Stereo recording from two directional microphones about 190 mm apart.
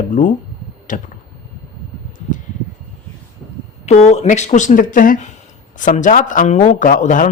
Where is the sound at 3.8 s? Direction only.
35° left (ahead or behind).